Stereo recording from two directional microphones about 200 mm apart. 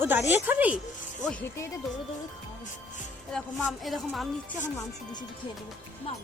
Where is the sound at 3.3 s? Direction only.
Centre (ahead or behind).